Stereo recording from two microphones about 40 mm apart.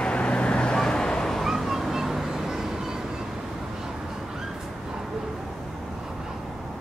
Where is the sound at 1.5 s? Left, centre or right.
Centre.